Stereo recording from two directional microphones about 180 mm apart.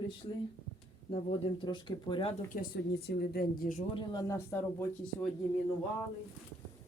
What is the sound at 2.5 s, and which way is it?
A woman's voice, 60° left (ahead or behind).